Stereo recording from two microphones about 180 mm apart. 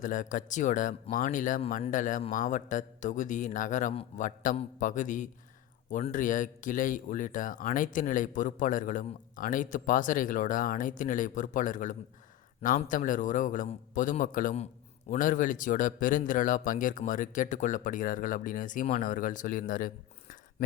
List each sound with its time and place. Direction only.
0.0 s speech: 45° left (ahead or behind)